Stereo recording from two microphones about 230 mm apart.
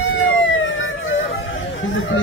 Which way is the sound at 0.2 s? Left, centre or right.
Left.